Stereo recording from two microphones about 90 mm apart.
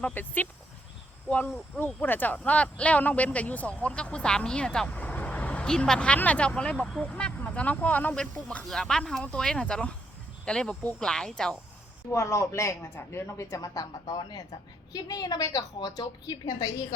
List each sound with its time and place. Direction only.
0.0 s speech: 20° left (ahead or behind)
1.8 s speech: 20° left (ahead or behind); by 11.5 s 5° left (ahead or behind)
12.1 s a woman's voice: 35° left (ahead or behind)
14.2 s a woman's voice: 55° left (ahead or behind)